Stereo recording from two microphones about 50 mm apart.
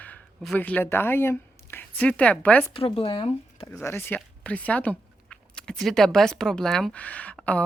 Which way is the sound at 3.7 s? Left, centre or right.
Left.